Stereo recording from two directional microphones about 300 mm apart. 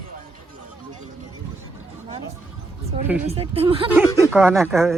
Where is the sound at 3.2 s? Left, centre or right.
Centre.